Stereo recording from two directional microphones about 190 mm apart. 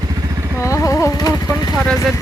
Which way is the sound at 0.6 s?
15° left (ahead or behind).